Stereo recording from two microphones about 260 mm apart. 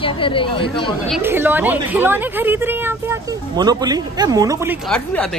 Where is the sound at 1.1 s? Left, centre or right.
Centre.